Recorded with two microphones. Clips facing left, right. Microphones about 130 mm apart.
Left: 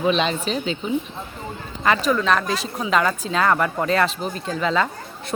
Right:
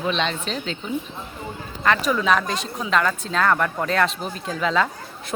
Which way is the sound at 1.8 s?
Centre (ahead or behind).